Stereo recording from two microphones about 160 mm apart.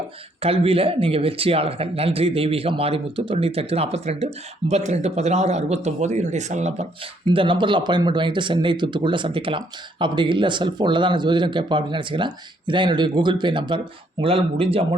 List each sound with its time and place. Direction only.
0.4 s a man's voice: 35° right (ahead or behind)